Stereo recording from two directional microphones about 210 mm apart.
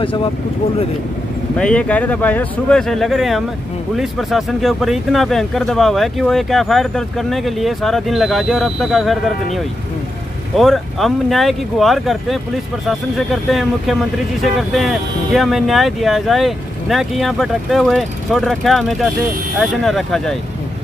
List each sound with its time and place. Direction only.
0.0 s speech: 25° left (ahead or behind)
1.6 s speech: 5° left (ahead or behind)
10.6 s speech: centre (ahead or behind)